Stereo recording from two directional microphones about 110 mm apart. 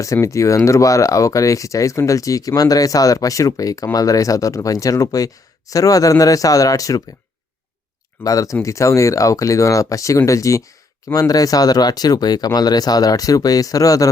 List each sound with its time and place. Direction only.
0.0 s speech: 30° left (ahead or behind)
8.2 s speech: 30° left (ahead or behind)